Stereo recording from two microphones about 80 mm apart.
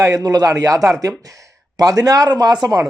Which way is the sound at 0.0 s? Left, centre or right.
Right.